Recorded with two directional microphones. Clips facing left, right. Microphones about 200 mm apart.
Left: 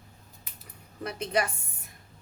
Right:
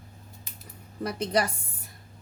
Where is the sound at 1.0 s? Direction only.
40° right (ahead or behind).